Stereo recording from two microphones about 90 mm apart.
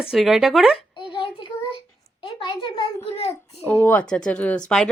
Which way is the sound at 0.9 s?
65° left (ahead or behind).